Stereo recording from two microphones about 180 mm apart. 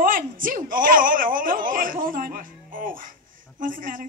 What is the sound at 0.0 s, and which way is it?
Speech, 50° right (ahead or behind).